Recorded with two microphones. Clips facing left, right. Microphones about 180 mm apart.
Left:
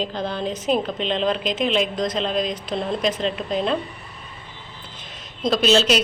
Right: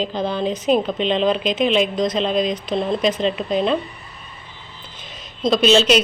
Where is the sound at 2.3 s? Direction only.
20° right (ahead or behind).